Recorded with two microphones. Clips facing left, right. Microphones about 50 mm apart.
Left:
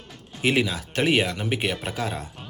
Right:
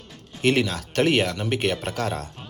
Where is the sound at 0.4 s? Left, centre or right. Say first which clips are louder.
Right 1 dB; centre.